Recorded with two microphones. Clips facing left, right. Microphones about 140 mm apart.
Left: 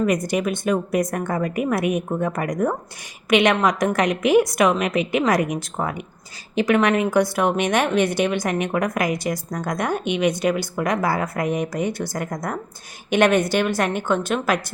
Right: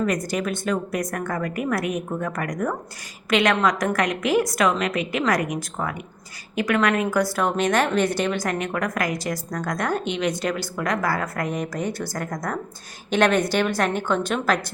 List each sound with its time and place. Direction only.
0.0 s a woman's voice: 20° left (ahead or behind)